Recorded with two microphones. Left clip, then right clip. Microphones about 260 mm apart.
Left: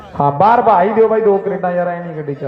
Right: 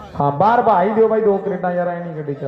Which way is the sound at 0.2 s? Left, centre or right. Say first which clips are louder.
Left 4 dB; left.